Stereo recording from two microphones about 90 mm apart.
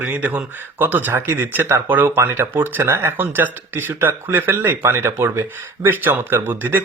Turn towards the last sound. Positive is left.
turn(degrees=-25)  # may be behind; listen again after turning